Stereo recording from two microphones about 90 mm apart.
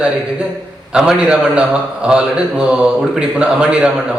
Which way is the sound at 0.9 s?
10° right (ahead or behind).